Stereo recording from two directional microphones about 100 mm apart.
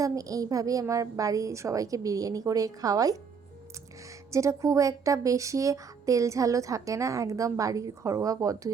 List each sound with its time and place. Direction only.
0.0 s speech: 35° right (ahead or behind)
4.3 s speech: 30° right (ahead or behind)